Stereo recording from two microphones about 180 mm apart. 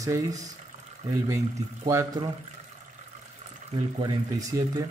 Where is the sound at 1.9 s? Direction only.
15° right (ahead or behind).